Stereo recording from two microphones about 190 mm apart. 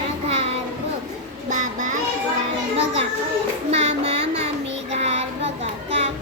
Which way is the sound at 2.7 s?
30° right (ahead or behind).